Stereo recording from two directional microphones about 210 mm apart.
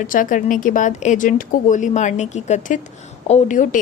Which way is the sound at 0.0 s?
40° left (ahead or behind).